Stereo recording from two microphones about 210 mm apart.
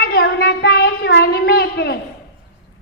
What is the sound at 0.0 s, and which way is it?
Child singing, 45° left (ahead or behind).